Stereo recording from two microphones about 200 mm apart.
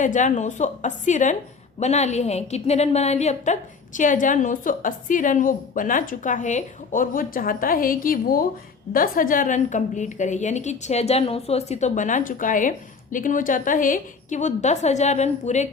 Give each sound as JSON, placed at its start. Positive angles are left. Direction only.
{"t": 0.0, "sound": "a woman's voice", "side_deg": 40}